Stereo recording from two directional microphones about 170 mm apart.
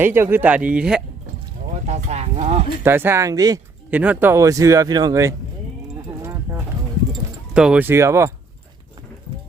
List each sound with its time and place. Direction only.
0.0 s speech: 15° right (ahead or behind)
1.7 s speech: 40° right (ahead or behind)
2.8 s speech: 15° right (ahead or behind)
3.9 s speech: 10° right (ahead or behind)
6.1 s clip-clop: 15° right (ahead or behind)
7.5 s speech: 5° right (ahead or behind)